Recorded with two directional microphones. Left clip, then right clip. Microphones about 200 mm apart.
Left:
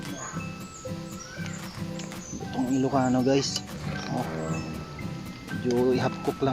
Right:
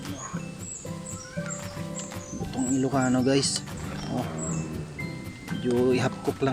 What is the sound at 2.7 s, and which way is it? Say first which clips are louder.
Speech: left 1 dB; 10° right (ahead or behind).